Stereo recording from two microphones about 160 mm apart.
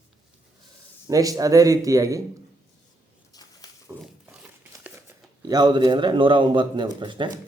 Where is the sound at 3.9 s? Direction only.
15° right (ahead or behind).